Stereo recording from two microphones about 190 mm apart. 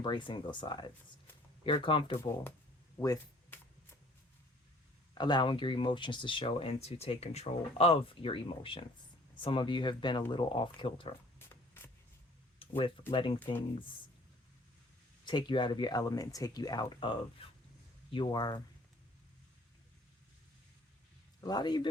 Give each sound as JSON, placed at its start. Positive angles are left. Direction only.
{"t": 0.0, "sound": "speech", "side_deg": 25}
{"t": 5.1, "sound": "speech", "side_deg": 25}
{"t": 11.3, "sound": "a sound", "side_deg": 10}
{"t": 12.5, "sound": "speech", "side_deg": 30}
{"t": 13.4, "sound": "speech", "side_deg": 10}
{"t": 15.2, "sound": "speech", "side_deg": 25}
{"t": 17.4, "sound": "a sound", "side_deg": 30}
{"t": 18.1, "sound": "speech", "side_deg": 25}
{"t": 21.4, "sound": "speech", "side_deg": 20}